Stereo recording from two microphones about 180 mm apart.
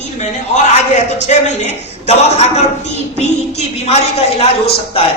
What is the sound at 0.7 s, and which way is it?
A man's voice, 40° left (ahead or behind).